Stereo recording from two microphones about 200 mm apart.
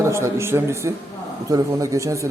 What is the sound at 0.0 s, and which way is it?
A man's voice, 15° right (ahead or behind).